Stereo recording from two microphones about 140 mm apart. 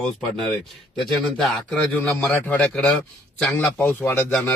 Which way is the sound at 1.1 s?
Centre (ahead or behind).